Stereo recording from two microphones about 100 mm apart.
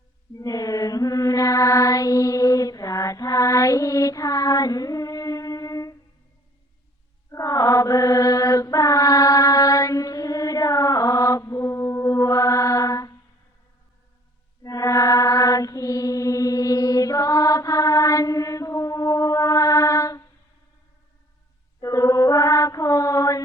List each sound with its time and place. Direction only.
0.3 s mantra: 40° left (ahead or behind)
7.3 s mantra: 35° left (ahead or behind)
14.6 s mantra: 35° left (ahead or behind)
21.8 s mantra: 35° left (ahead or behind)